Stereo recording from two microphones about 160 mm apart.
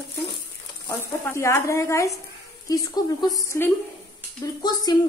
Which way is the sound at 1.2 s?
15° left (ahead or behind).